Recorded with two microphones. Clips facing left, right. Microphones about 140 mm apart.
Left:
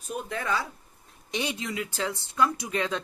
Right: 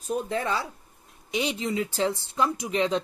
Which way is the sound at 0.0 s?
30° right (ahead or behind).